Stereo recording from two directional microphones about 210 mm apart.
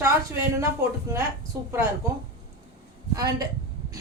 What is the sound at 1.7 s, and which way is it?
Speech, 10° right (ahead or behind).